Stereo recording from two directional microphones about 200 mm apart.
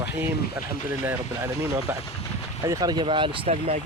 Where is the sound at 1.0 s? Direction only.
10° right (ahead or behind); by 3.8 s 30° right (ahead or behind).